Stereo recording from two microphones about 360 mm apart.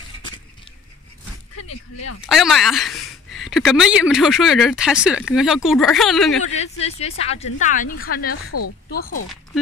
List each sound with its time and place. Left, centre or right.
1.6 s speech: left
2.2 s speech: centre
6.5 s a woman's voice: centre
8.3 s speech: left